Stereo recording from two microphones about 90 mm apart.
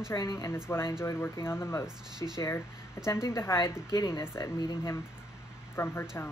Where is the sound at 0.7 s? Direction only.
25° left (ahead or behind).